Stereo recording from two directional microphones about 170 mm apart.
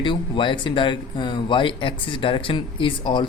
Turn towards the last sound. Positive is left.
turn(degrees=30)  # may be behind; listen again after turning